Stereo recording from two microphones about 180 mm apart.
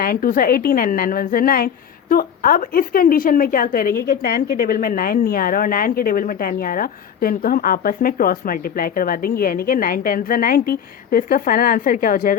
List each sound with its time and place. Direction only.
0.0 s a woman's voice: 55° left (ahead or behind)